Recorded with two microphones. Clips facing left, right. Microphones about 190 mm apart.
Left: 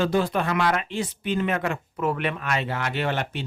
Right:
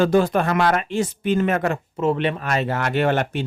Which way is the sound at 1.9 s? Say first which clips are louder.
Right 5 dB; 25° right (ahead or behind).